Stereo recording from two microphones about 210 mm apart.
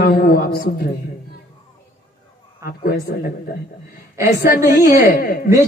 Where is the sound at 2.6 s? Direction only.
45° left (ahead or behind).